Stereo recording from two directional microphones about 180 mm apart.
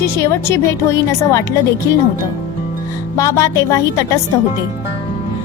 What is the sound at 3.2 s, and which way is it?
A woman's voice, 15° left (ahead or behind).